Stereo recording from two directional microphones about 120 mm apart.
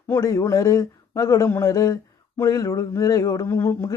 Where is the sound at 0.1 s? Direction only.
25° left (ahead or behind).